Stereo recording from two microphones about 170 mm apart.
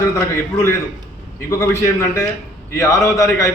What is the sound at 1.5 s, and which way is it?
A man's voice, 15° left (ahead or behind).